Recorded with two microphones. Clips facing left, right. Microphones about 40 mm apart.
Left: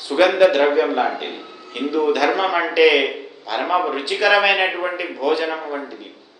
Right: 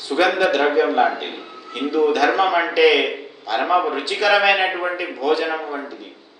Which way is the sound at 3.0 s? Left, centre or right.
Centre.